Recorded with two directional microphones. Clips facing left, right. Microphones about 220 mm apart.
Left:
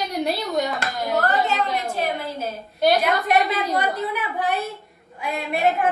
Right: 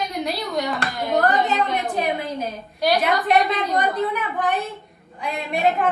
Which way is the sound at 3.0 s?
Centre (ahead or behind).